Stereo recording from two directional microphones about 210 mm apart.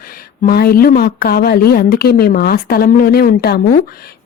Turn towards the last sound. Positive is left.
turn(degrees=45)  # may be behind; listen again after turning